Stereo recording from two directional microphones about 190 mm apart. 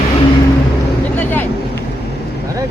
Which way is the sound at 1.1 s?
10° left (ahead or behind).